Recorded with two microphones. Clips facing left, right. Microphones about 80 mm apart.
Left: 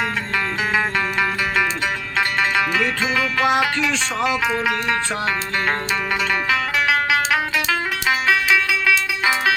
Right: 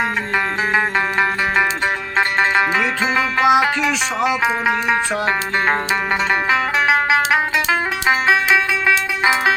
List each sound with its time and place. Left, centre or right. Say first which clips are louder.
0.7 s music: right 3 dB; right
2.1 s music: right 3 dB; right
3.0 s music: right 3 dB; centre
6.5 s music: right 3 dB; right